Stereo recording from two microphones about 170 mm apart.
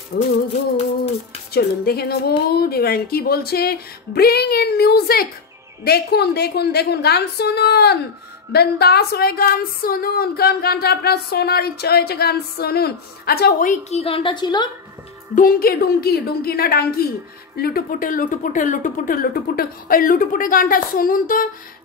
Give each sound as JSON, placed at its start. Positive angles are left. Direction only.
{"t": 0.1, "sound": "speech", "side_deg": 65}
{"t": 1.5, "sound": "speech", "side_deg": 70}
{"t": 13.8, "sound": "speech", "side_deg": 35}
{"t": 15.3, "sound": "speech", "side_deg": 60}